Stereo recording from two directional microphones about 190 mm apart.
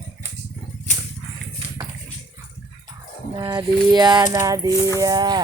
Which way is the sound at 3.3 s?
20° right (ahead or behind).